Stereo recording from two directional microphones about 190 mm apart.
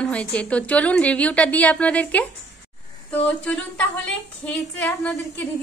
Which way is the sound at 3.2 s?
5° left (ahead or behind).